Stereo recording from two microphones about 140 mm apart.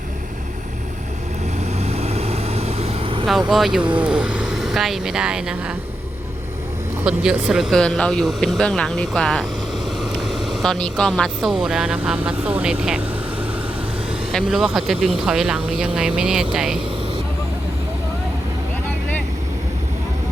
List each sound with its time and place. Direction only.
1.5 s vehicle: 50° right (ahead or behind)
3.5 s speech: 5° right (ahead or behind)
7.0 s speech: 5° right (ahead or behind)
14.3 s speech: 5° right (ahead or behind)